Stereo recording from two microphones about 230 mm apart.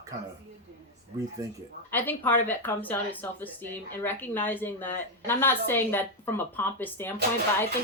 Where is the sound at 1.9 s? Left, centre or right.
Centre.